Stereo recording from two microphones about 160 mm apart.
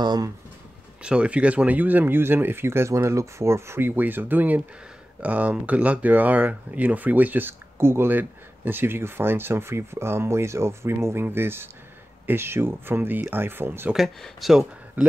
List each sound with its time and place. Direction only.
0.0 s speech: 25° right (ahead or behind)
1.0 s speech: 5° right (ahead or behind)